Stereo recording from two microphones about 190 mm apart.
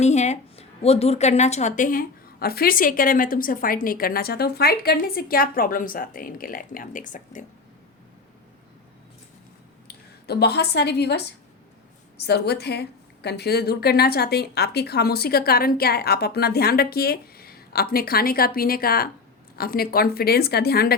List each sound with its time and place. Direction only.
0.0 s a woman's voice: 35° left (ahead or behind)
9.8 s a woman's voice: 60° left (ahead or behind)